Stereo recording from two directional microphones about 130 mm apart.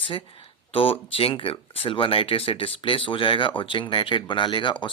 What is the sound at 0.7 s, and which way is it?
Speech, 45° left (ahead or behind).